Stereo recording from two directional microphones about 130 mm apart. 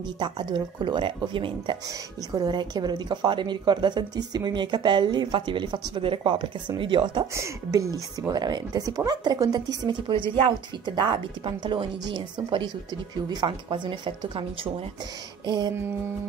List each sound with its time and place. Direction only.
0.2 s speech: 35° right (ahead or behind)
7.3 s speech: 25° right (ahead or behind)